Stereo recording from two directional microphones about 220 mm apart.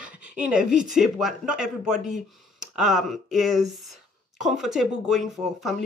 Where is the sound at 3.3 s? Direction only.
Centre (ahead or behind).